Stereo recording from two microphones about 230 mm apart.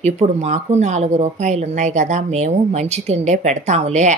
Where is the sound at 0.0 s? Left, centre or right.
Right.